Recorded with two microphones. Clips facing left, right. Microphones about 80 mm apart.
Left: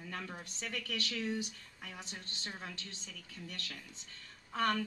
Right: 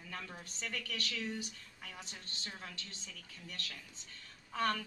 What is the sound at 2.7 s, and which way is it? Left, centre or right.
A woman's voice, left.